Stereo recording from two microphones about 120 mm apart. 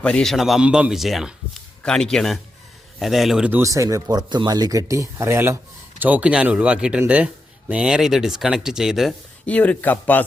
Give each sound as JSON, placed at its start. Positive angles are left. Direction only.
{"t": 0.0, "sound": "speech", "side_deg": 5}
{"t": 3.5, "sound": "speech", "side_deg": -25}
{"t": 9.5, "sound": "speech", "side_deg": 10}